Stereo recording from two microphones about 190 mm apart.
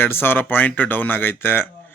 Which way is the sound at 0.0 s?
10° left (ahead or behind).